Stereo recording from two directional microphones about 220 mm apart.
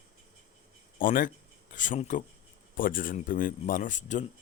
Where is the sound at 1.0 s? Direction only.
40° left (ahead or behind).